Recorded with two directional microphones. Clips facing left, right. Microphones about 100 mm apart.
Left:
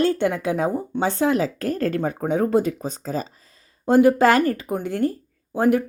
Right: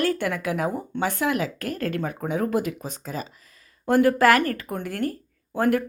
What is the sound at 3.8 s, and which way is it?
Speech, 20° left (ahead or behind).